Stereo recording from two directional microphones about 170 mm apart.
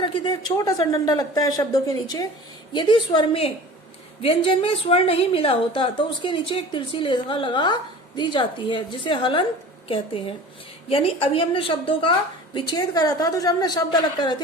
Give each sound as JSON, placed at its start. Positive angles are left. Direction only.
{"t": 0.0, "sound": "a woman's voice", "side_deg": 25}
{"t": 10.8, "sound": "a woman's voice", "side_deg": 35}